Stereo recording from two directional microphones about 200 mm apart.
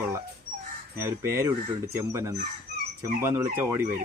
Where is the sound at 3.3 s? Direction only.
15° right (ahead or behind).